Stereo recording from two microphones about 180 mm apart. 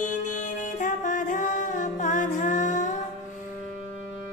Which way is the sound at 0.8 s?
45° left (ahead or behind).